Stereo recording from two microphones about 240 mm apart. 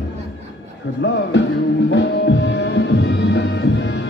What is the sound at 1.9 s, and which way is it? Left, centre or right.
Music, left.